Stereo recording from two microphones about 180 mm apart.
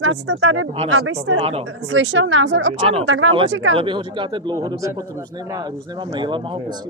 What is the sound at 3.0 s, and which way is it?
Speech, 90° right.